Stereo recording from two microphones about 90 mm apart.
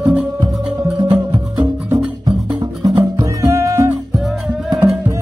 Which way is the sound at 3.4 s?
35° right (ahead or behind).